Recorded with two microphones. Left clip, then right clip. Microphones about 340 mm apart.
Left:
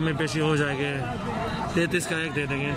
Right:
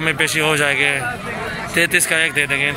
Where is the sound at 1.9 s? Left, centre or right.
Centre.